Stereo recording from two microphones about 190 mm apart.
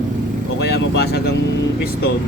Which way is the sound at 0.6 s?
60° left (ahead or behind).